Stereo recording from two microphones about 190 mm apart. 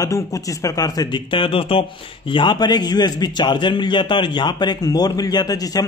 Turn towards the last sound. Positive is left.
turn(degrees=20)  # may be behind; listen again after turning